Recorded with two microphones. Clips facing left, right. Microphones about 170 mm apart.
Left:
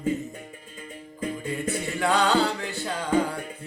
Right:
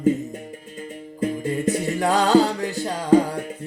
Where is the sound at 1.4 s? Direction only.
40° right (ahead or behind).